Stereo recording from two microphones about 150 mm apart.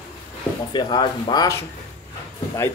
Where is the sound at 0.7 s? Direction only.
30° left (ahead or behind).